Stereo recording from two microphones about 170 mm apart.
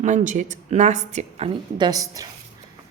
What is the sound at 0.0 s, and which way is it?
A woman's voice, 45° right (ahead or behind).